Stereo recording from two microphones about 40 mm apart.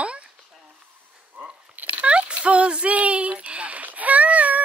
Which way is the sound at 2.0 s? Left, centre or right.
Right.